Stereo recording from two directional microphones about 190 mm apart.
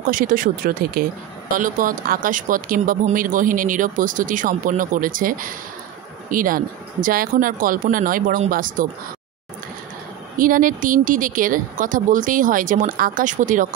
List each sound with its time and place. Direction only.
0.0 s speech: 45° right (ahead or behind)
10.3 s speech: 45° right (ahead or behind)